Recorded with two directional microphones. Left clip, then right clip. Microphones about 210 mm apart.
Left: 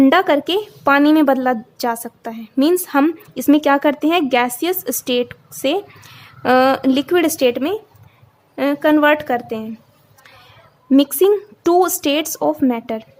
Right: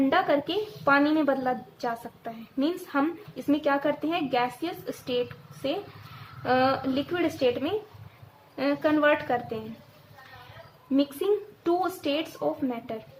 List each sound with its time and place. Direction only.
0.0 s a woman's voice: 55° left (ahead or behind)
10.9 s a woman's voice: 55° left (ahead or behind)